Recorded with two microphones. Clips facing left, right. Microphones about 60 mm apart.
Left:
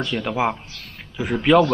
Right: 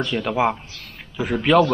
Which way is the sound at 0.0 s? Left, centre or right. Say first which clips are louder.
Right 2 dB; centre.